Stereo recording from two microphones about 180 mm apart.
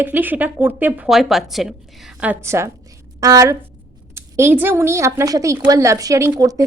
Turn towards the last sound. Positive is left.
turn(degrees=-20)  # may be behind; listen again after turning